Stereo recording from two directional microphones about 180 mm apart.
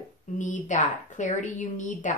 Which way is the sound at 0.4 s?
45° left (ahead or behind).